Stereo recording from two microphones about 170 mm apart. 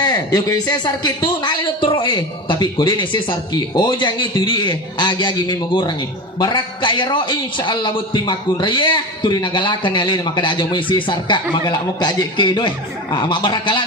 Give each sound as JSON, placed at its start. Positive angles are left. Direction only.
{"t": 0.0, "sound": "a man's voice", "side_deg": 20}